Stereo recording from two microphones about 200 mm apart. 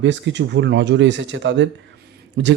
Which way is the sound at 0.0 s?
65° right (ahead or behind).